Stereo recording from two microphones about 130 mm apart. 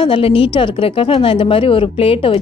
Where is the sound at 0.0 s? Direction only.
40° left (ahead or behind).